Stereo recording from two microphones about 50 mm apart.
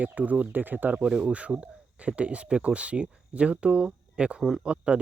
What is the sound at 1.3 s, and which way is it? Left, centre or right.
Speech, right.